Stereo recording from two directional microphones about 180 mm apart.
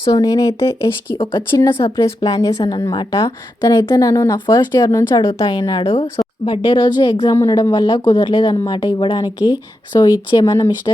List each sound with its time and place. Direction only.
0.0 s a woman's voice: 20° left (ahead or behind)